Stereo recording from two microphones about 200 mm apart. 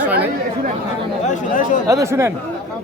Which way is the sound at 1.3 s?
40° left (ahead or behind).